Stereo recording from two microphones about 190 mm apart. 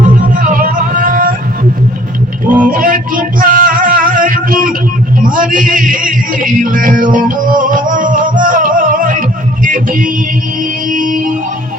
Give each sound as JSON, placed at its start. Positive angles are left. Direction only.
{"t": 0.0, "sound": "music", "side_deg": -45}
{"t": 2.6, "sound": "music", "side_deg": -45}